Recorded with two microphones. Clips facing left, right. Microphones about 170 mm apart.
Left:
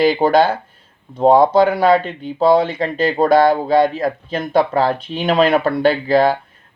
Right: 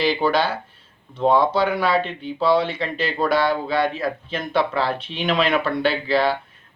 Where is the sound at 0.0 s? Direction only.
45° left (ahead or behind).